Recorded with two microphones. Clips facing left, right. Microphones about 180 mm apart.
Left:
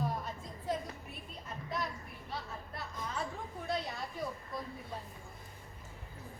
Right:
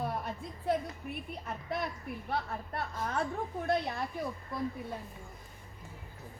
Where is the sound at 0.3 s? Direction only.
65° right (ahead or behind).